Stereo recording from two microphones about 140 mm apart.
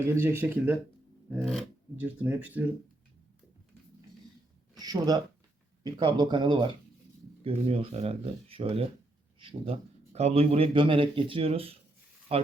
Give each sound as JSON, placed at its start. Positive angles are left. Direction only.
{"t": 0.1, "sound": "speech", "side_deg": -15}
{"t": 1.4, "sound": "speech", "side_deg": 0}
{"t": 2.0, "sound": "speech", "side_deg": -10}
{"t": 4.8, "sound": "speech", "side_deg": -30}
{"t": 7.4, "sound": "speech", "side_deg": -45}